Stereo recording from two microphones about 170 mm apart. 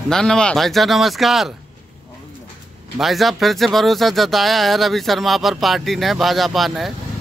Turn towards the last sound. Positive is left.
turn(degrees=0)  # may be behind; listen again after turning